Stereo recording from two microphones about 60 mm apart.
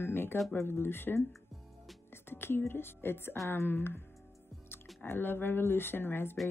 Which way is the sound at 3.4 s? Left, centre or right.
Left.